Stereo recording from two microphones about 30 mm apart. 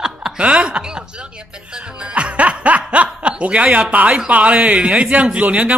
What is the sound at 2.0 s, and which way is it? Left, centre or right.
Music, right.